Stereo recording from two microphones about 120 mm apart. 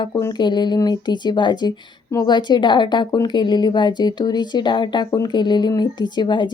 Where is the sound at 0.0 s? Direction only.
30° left (ahead or behind).